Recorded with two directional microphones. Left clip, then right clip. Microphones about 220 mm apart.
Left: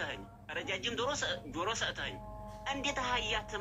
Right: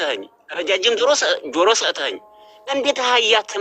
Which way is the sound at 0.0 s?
45° right (ahead or behind).